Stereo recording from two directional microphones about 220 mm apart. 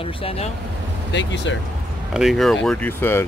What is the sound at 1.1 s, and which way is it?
Speech, 55° left (ahead or behind).